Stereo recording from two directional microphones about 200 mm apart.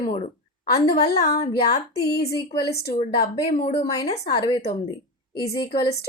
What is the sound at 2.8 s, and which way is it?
Speech, 55° left (ahead or behind).